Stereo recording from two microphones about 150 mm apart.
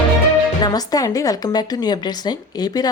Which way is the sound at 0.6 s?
25° left (ahead or behind).